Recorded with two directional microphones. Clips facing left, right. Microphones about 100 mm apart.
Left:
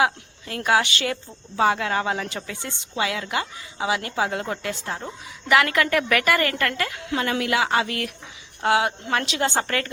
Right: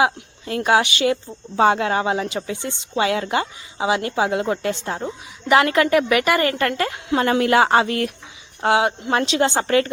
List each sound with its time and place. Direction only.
0.0 s a woman's voice: 25° right (ahead or behind)
3.0 s a woman's voice: 30° right (ahead or behind)